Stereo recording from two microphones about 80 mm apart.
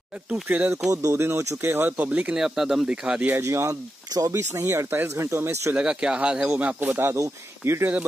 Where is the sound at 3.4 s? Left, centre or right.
Right.